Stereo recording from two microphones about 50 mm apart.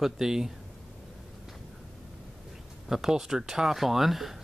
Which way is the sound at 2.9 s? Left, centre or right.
Centre.